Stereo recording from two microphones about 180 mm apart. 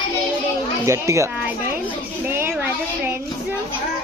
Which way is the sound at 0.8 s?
15° right (ahead or behind).